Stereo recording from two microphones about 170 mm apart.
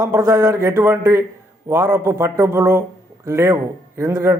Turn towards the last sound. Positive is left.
turn(degrees=-15)  # may be behind; listen again after turning